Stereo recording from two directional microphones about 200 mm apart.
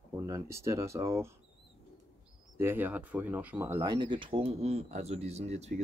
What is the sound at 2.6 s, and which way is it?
Speech, 10° right (ahead or behind).